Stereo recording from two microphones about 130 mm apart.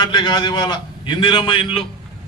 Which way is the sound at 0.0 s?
35° left (ahead or behind).